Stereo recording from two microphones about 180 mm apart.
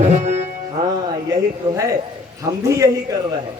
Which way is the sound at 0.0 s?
40° right (ahead or behind).